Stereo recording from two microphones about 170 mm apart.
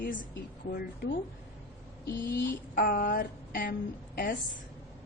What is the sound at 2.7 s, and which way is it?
A woman's voice, 60° left (ahead or behind).